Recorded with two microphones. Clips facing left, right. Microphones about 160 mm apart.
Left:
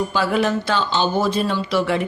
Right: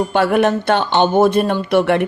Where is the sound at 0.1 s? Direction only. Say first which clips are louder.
Right 5 dB; 60° right (ahead or behind).